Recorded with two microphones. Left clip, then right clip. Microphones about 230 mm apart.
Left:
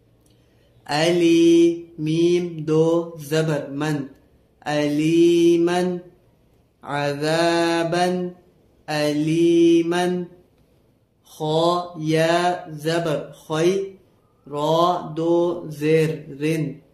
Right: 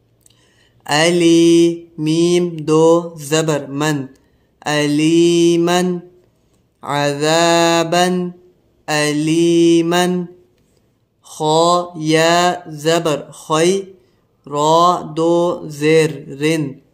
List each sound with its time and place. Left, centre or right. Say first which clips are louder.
0.8 s mantra: right 5 dB; right
11.2 s mantra: right 7 dB; right